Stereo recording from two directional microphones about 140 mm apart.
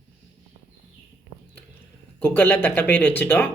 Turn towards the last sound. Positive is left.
turn(degrees=15)  # may be behind; listen again after turning